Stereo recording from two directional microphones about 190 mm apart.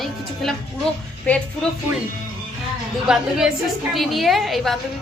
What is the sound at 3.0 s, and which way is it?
A woman's voice, 5° right (ahead or behind).